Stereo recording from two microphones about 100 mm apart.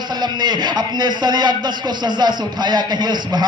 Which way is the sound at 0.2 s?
45° right (ahead or behind).